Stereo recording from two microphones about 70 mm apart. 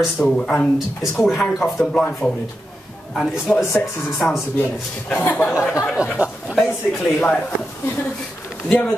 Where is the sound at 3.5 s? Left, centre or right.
Centre.